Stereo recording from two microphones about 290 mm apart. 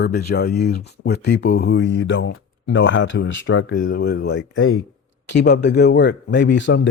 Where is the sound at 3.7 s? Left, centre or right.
Left.